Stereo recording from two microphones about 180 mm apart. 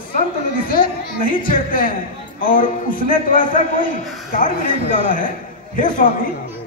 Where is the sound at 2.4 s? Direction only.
50° left (ahead or behind).